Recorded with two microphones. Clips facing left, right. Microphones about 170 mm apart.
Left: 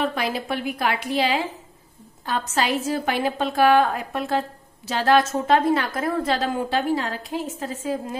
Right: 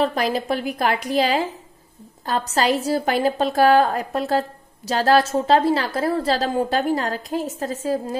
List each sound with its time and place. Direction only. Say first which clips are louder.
0.0 s a woman's voice: right 4 dB; 40° right (ahead or behind)